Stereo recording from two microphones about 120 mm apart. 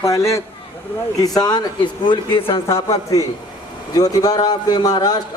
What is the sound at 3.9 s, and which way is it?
A man's voice, 30° left (ahead or behind).